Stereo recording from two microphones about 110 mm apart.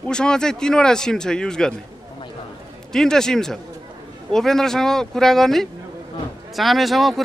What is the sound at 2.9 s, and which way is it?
Speech, 5° left (ahead or behind).